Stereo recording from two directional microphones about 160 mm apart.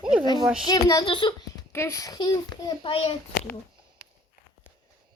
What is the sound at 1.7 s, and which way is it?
A child's voice, 15° left (ahead or behind).